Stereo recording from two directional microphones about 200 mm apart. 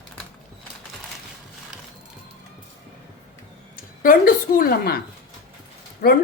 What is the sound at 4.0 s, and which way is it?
A woman's voice, 45° left (ahead or behind).